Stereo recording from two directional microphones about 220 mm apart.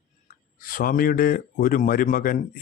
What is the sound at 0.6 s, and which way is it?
Speech, 40° left (ahead or behind).